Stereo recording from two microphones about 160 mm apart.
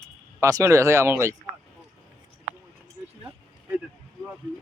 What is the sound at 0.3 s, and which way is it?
A man's voice, 20° right (ahead or behind).